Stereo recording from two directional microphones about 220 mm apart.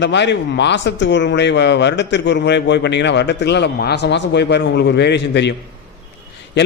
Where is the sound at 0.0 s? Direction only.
50° left (ahead or behind).